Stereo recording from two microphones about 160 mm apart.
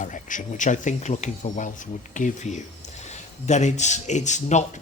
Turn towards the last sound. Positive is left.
turn(degrees=45)  # may be behind; listen again after turning